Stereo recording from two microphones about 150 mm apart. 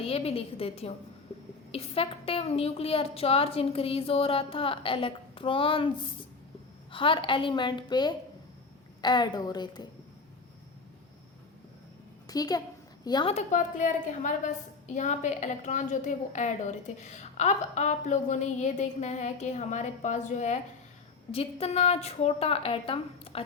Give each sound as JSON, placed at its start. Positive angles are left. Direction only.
{"t": 0.0, "sound": "a woman's voice", "side_deg": 40}
{"t": 6.9, "sound": "a woman's voice", "side_deg": 35}
{"t": 12.3, "sound": "a woman's voice", "side_deg": 25}
{"t": 13.3, "sound": "a woman's voice", "side_deg": 55}
{"t": 21.3, "sound": "a woman's voice", "side_deg": 40}